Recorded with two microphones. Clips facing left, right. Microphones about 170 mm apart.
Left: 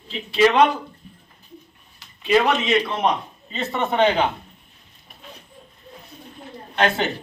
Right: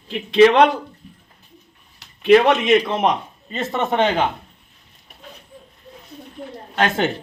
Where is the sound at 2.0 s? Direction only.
70° right (ahead or behind); by 4.0 s 45° right (ahead or behind).